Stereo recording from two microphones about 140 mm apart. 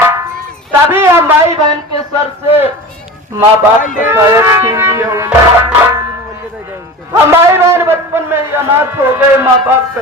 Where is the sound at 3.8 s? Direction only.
70° left (ahead or behind).